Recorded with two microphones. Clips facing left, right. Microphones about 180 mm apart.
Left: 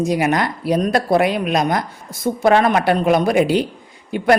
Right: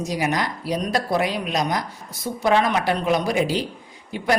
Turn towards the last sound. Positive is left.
turn(degrees=60)  # may be behind; listen again after turning